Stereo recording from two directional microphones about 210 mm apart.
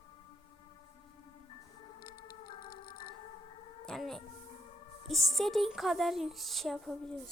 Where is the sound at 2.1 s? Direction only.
20° left (ahead or behind).